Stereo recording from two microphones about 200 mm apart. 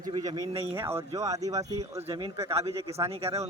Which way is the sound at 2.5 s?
30° right (ahead or behind).